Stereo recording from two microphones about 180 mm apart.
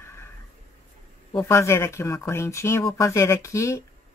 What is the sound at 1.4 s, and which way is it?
Speech, 15° left (ahead or behind).